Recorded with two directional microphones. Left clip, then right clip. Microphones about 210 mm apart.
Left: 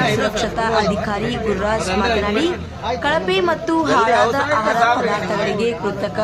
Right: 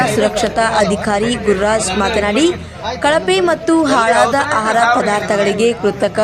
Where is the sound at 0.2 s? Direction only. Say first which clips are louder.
Right 5 dB; 30° right (ahead or behind).